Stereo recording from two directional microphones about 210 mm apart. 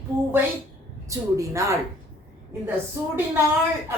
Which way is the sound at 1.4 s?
15° right (ahead or behind).